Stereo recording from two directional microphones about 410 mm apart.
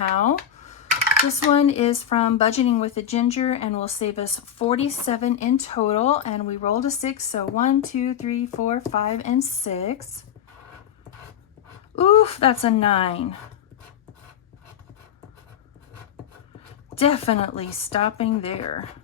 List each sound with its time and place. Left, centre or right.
0.2 s a sound: centre
1.5 s speech: centre
11.9 s speech: centre
16.9 s speech: centre